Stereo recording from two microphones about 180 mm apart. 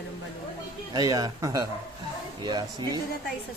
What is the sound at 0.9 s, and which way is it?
Speech, 20° right (ahead or behind).